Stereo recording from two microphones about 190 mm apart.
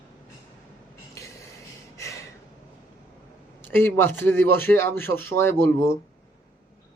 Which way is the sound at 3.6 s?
10° left (ahead or behind).